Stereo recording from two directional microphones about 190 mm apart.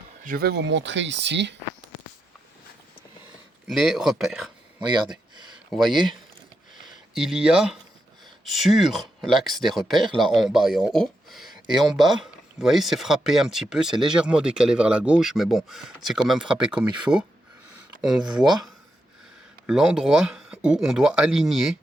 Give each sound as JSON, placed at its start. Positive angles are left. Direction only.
{"t": 0.2, "sound": "speech", "side_deg": -50}
{"t": 3.7, "sound": "speech", "side_deg": -5}
{"t": 5.7, "sound": "speech", "side_deg": 0}
{"t": 19.6, "sound": "speech", "side_deg": -5}